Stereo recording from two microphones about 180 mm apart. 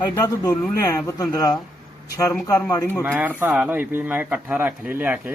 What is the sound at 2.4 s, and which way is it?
Speech, 20° left (ahead or behind).